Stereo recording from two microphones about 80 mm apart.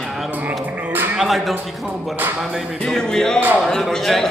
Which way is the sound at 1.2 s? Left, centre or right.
Centre.